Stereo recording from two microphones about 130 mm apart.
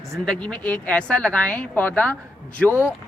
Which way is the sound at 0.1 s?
5° left (ahead or behind).